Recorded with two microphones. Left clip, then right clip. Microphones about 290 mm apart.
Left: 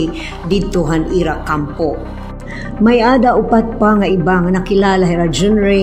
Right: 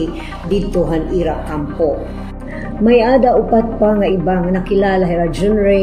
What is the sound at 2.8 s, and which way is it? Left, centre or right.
Speech, left.